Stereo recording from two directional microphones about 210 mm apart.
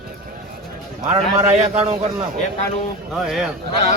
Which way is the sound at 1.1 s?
30° right (ahead or behind).